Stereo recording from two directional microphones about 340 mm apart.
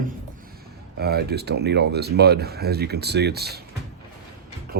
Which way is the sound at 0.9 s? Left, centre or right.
Right.